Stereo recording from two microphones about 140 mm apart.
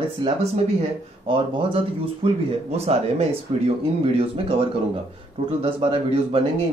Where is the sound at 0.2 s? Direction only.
35° right (ahead or behind).